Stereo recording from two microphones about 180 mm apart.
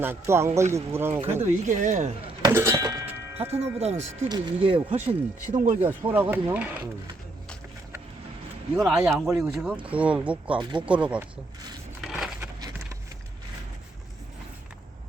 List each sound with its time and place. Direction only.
0.0 s speech: 15° right (ahead or behind)
1.6 s speech: 45° right (ahead or behind)
2.4 s music: 15° right (ahead or behind)
3.1 s tubular bells: 35° right (ahead or behind)
3.8 s speech: 35° right (ahead or behind)
5.5 s speech: 45° right (ahead or behind)
5.8 s speech: 10° right (ahead or behind)
8.7 s speech: 5° right (ahead or behind)
12.0 s crushing: centre (ahead or behind)